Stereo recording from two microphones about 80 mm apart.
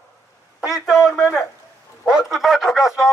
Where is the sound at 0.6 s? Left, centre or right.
Centre.